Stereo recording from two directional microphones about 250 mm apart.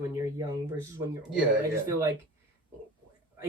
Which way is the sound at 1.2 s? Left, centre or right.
Centre.